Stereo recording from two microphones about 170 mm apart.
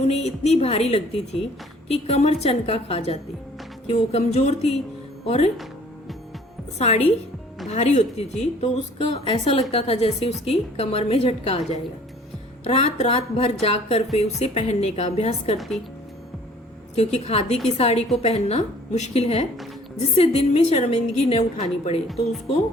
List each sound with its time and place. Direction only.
0.0 s speech: 40° left (ahead or behind)
6.7 s speech: 40° left (ahead or behind)
12.6 s speech: 35° left (ahead or behind)
15.5 s speech: centre (ahead or behind)
16.9 s speech: 40° left (ahead or behind)